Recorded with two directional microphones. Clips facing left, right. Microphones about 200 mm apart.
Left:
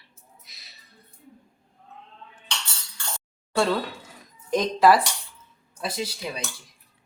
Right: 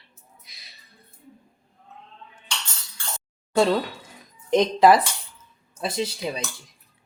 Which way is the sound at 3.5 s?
20° right (ahead or behind).